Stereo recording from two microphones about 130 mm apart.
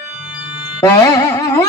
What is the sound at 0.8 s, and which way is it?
Carnatic music, 30° left (ahead or behind).